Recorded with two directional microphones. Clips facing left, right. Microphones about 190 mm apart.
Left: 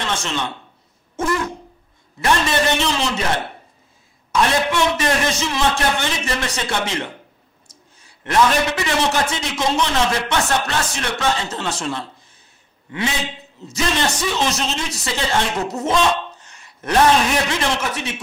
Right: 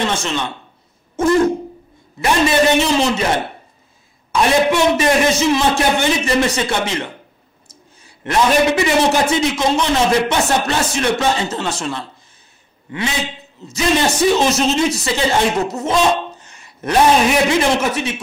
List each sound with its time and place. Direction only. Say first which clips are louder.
0.0 s speech: right 4 dB; 10° right (ahead or behind)
2.1 s a man's voice: right 4 dB; 10° right (ahead or behind)
13.9 s speech: right 6 dB; 5° right (ahead or behind)
14.2 s speech: right 7 dB; 40° right (ahead or behind)
14.5 s speech: right 9 dB; 10° right (ahead or behind)